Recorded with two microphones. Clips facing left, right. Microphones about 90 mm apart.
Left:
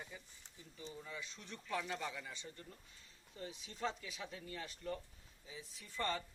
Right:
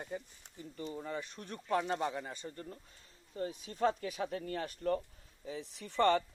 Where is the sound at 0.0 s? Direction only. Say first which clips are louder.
Right 11 dB; 55° right (ahead or behind).